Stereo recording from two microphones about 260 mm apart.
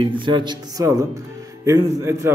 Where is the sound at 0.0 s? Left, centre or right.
Centre.